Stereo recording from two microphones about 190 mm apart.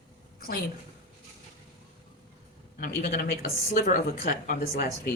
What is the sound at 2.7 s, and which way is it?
Speech, 50° left (ahead or behind).